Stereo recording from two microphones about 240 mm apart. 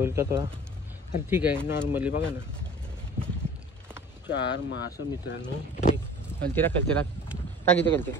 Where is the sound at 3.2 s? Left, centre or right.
Right.